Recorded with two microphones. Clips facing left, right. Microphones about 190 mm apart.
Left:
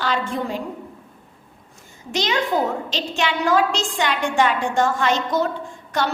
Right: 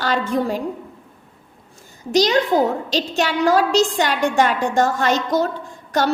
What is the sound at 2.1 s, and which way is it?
A woman's voice, 40° right (ahead or behind).